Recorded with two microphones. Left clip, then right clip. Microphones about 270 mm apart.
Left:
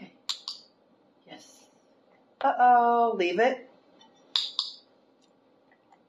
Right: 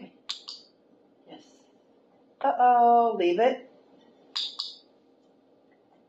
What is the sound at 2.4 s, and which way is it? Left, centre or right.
Speech, left.